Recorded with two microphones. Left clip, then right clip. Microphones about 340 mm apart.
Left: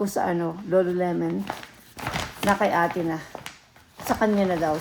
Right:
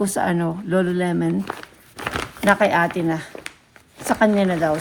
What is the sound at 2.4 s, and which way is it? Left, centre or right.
Speech, right.